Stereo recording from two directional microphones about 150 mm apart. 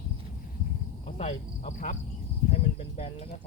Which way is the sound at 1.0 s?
50° left (ahead or behind).